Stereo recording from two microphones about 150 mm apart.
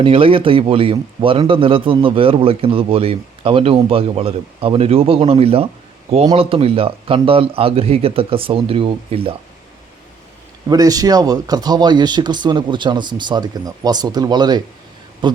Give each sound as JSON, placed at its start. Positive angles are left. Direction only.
{"t": 0.0, "sound": "a man's voice", "side_deg": -35}
{"t": 10.7, "sound": "a man's voice", "side_deg": -25}